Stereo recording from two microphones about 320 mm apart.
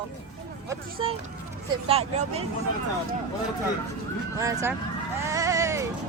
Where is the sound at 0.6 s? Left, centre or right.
Centre.